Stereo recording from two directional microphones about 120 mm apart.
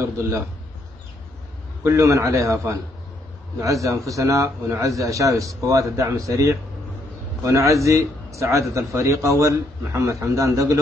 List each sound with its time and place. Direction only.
0.0 s a man's voice: 25° right (ahead or behind)
1.9 s a man's voice: 25° right (ahead or behind)